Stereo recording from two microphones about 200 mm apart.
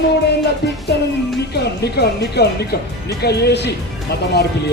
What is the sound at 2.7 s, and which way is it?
Speech, 50° left (ahead or behind).